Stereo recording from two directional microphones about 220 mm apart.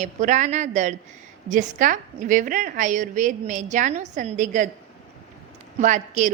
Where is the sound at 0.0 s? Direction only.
35° right (ahead or behind).